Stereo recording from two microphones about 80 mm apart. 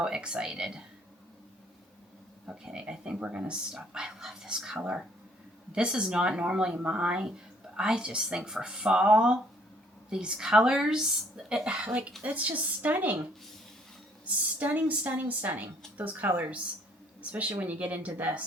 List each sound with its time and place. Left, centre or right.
0.0 s speech: centre
2.5 s speech: centre
14.3 s speech: right
17.6 s speech: centre